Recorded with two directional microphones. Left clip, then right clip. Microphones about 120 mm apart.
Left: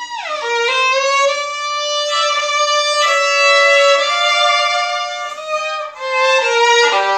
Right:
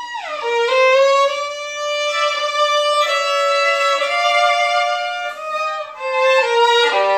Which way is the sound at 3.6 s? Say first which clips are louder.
Left 5 dB; centre (ahead or behind).